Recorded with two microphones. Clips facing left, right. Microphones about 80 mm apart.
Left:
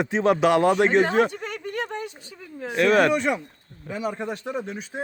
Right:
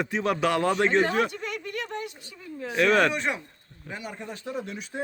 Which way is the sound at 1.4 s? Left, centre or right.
Left.